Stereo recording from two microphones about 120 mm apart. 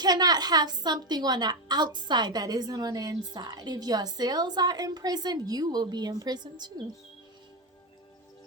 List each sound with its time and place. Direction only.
0.0 s a woman's voice: 35° right (ahead or behind)